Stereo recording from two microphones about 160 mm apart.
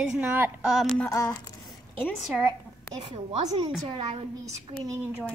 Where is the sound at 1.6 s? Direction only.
5° left (ahead or behind).